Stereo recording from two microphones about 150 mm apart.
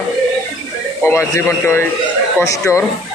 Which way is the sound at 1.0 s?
15° left (ahead or behind).